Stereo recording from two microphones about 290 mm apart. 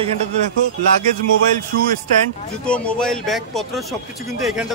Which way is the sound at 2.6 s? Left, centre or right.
Centre.